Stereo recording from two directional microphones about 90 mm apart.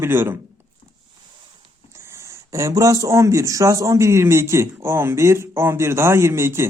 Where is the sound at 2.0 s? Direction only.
30° right (ahead or behind).